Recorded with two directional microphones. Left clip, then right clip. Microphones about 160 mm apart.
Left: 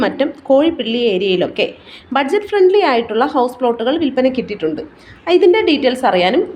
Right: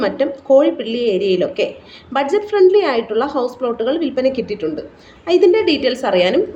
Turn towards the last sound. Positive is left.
turn(degrees=30)  # may be behind; listen again after turning